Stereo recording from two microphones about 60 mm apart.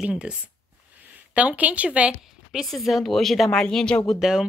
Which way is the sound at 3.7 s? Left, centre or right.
Centre.